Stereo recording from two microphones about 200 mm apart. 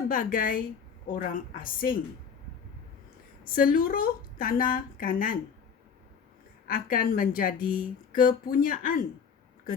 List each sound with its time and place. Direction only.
0.1 s speech: 45° left (ahead or behind)
3.4 s speech: 45° left (ahead or behind)
6.7 s speech: 45° left (ahead or behind)